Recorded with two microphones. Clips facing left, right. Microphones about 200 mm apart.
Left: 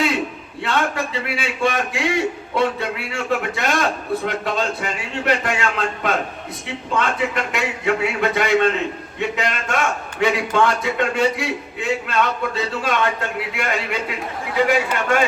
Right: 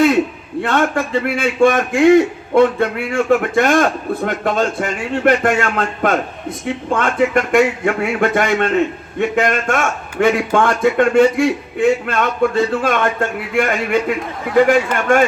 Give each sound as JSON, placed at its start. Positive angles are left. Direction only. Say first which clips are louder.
{"t": 0.6, "sound": "a man's voice", "louder": "right 5 dB", "side_deg": -50}